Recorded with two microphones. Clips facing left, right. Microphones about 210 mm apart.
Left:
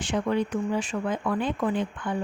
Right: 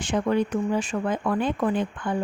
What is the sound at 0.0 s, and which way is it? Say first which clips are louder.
Speech: right 2 dB; 45° right (ahead or behind).